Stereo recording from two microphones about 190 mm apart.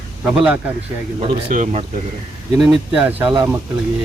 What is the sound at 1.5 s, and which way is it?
Speech, 40° right (ahead or behind).